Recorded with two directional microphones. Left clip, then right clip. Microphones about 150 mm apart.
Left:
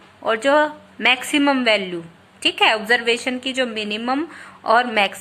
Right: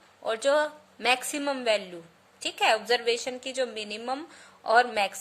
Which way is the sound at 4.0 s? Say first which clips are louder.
Left 10 dB; 25° right (ahead or behind).